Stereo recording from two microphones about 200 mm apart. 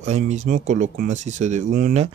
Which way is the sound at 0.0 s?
35° right (ahead or behind).